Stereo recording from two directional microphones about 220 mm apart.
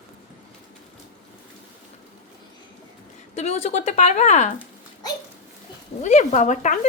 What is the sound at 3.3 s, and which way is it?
Speech, 30° left (ahead or behind).